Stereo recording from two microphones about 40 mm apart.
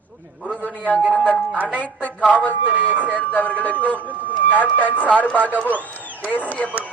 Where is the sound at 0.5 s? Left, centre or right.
Left.